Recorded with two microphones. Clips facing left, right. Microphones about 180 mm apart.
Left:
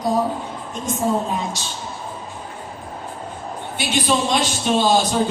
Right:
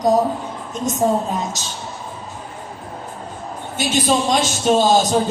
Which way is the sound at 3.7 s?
45° right (ahead or behind).